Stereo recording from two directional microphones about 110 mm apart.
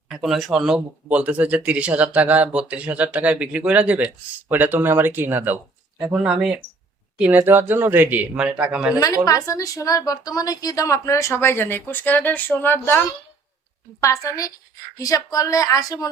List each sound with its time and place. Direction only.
0.1 s speech: 5° right (ahead or behind); by 5.5 s 20° right (ahead or behind)
6.1 s speech: 5° right (ahead or behind)
9.2 s a woman's voice: 30° left (ahead or behind)
14.0 s a woman's voice: 30° left (ahead or behind)